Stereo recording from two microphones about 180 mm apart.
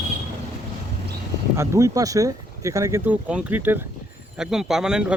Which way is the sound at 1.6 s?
15° right (ahead or behind).